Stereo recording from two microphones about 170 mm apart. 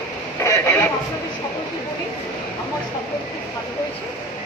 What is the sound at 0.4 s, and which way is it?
Radio, 15° left (ahead or behind).